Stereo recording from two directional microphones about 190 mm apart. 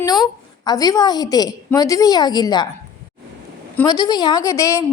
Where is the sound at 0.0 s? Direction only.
20° left (ahead or behind).